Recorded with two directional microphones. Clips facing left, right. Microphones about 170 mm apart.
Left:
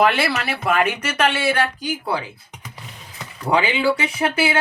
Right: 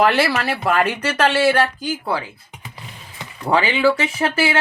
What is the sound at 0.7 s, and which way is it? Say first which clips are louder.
Speech: even; 15° left (ahead or behind).